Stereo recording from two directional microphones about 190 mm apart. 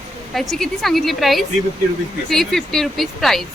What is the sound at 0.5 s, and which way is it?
Speech, centre (ahead or behind).